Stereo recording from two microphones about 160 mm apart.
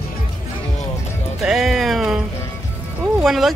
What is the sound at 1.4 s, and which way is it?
Music, 5° right (ahead or behind).